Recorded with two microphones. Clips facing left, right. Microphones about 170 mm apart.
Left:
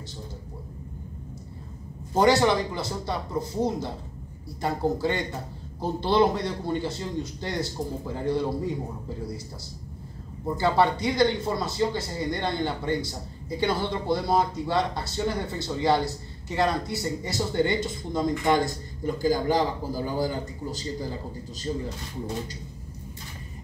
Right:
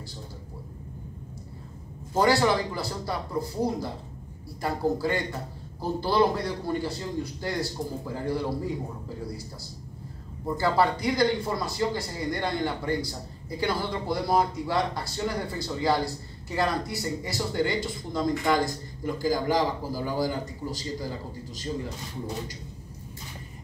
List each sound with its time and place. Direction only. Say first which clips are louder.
2.1 s speech: left 2 dB; 20° left (ahead or behind)
10.4 s speech: left 1 dB; 25° left (ahead or behind)